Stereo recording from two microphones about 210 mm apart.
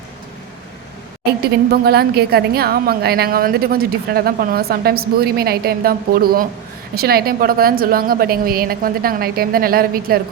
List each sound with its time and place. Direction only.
1.7 s a woman's voice: 50° right (ahead or behind)